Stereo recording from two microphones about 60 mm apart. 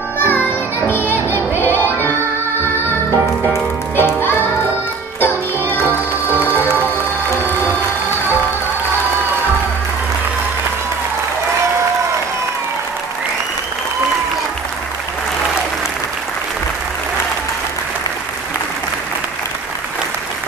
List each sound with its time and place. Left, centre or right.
0.2 s music: left
3.9 s music: left